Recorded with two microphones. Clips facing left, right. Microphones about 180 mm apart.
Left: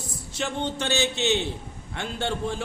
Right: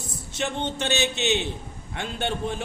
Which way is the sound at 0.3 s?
20° right (ahead or behind).